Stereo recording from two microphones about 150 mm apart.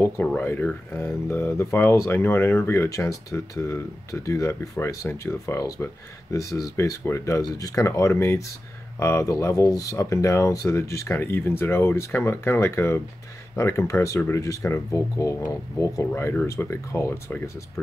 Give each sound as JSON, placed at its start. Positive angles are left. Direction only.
{"t": 0.0, "sound": "speech", "side_deg": 10}